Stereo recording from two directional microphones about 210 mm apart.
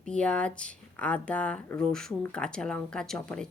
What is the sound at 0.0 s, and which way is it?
Speech, 5° left (ahead or behind).